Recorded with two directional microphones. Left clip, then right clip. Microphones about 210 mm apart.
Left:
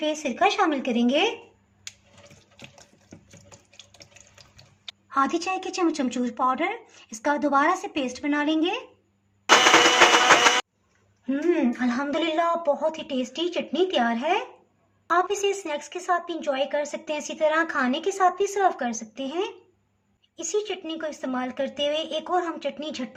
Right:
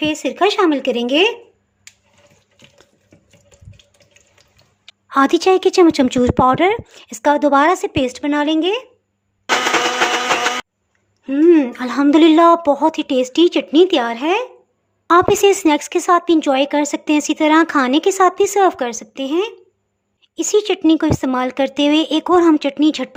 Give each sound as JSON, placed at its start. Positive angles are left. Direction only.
{"t": 0.0, "sound": "speech", "side_deg": -45}
{"t": 5.0, "sound": "speech", "side_deg": -45}
{"t": 11.3, "sound": "speech", "side_deg": -40}